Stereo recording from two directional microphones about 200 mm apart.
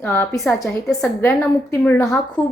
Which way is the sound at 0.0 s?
10° left (ahead or behind).